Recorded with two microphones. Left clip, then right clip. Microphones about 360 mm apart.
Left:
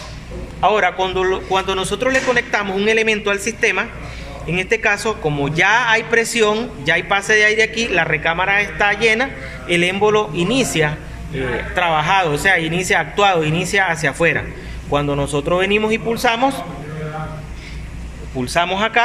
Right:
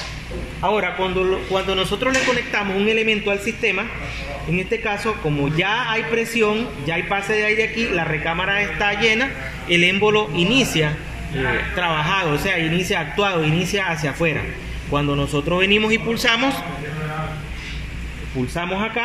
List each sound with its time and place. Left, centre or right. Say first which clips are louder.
0.6 s a man's voice: left 5 dB; left
18.5 s a man's voice: left 8 dB; left